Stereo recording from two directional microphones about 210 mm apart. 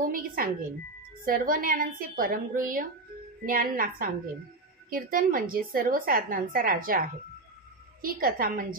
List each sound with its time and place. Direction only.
0.0 s a woman's voice: 40° right (ahead or behind)